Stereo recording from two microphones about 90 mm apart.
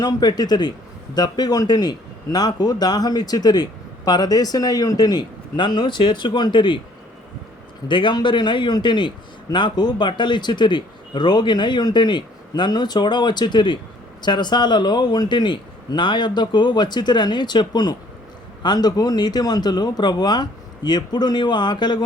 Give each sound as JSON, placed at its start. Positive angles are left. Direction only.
{"t": 0.0, "sound": "a man's voice", "side_deg": 50}
{"t": 5.5, "sound": "a man's voice", "side_deg": 60}
{"t": 7.9, "sound": "a man's voice", "side_deg": 60}